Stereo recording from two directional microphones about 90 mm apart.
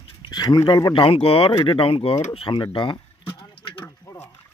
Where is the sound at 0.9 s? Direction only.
90° left.